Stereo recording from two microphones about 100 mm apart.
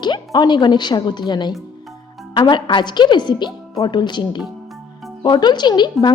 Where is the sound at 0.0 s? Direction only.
50° left (ahead or behind).